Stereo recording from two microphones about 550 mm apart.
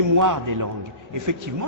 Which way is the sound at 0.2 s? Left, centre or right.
Right.